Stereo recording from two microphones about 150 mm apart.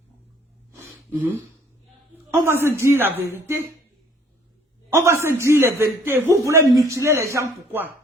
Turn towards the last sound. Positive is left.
turn(degrees=-15)  # may be behind; listen again after turning